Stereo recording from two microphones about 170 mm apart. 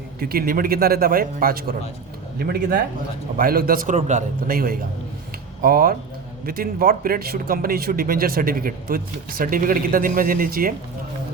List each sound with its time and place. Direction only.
0.2 s speech: 60° right (ahead or behind); by 4.2 s 45° right (ahead or behind)
4.4 s speech: 60° right (ahead or behind)